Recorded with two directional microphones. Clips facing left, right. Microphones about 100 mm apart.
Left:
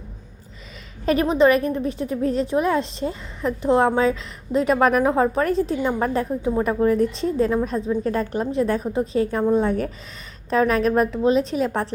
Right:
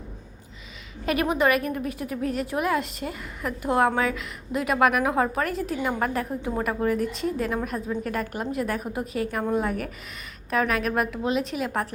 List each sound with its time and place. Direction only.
1.0 s a woman's voice: 30° left (ahead or behind)